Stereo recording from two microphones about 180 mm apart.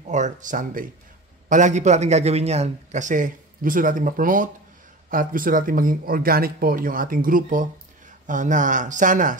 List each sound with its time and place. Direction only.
0.0 s a man's voice: 45° right (ahead or behind)